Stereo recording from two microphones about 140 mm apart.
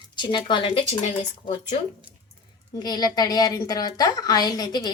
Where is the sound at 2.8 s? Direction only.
30° left (ahead or behind).